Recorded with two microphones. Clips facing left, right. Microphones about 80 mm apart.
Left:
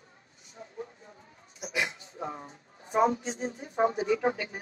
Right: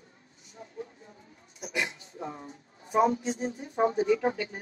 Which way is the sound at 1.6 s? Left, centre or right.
Left.